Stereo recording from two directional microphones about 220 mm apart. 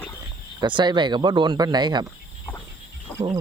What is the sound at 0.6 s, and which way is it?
Speech, 20° right (ahead or behind).